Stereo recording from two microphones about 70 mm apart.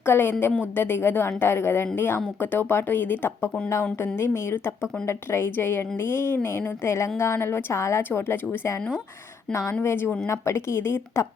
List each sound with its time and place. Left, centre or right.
0.0 s a woman's voice: left